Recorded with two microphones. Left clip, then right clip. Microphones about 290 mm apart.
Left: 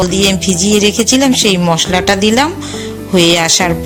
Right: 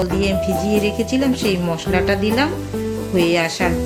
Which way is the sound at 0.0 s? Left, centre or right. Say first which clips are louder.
Left 7 dB; left.